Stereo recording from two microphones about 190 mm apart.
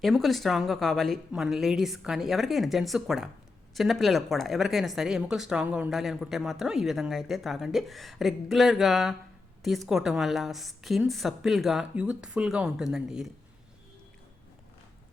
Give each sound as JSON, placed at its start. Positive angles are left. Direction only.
{"t": 0.0, "sound": "speech", "side_deg": 0}